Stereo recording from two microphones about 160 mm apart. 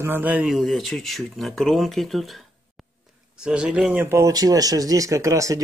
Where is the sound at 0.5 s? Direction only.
Centre (ahead or behind).